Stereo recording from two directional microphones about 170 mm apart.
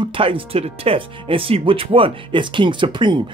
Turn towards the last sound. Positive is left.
turn(degrees=-25)  # may be behind; listen again after turning